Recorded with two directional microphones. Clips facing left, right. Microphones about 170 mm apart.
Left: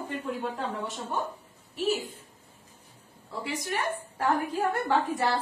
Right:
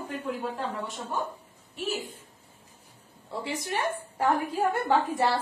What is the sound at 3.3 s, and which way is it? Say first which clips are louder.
A woman's voice: right 1 dB; 25° right (ahead or behind).